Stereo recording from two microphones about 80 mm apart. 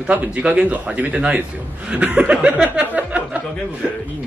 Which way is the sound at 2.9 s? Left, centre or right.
Centre.